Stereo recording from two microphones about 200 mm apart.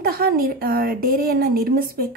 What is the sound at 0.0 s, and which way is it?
A woman's voice, 50° right (ahead or behind).